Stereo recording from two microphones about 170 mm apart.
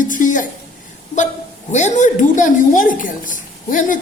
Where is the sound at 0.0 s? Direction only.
50° left (ahead or behind).